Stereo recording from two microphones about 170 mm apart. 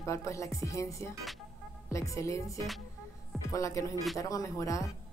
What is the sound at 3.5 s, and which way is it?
Speech, 20° left (ahead or behind).